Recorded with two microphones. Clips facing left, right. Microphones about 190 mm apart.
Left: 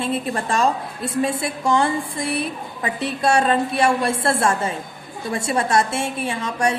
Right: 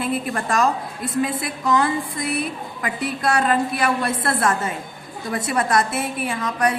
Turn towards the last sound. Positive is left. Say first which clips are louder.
# even
turn(degrees=25)  # may be behind; listen again after turning